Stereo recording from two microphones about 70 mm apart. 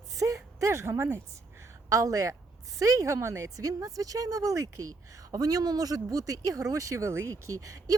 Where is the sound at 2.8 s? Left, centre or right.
Right.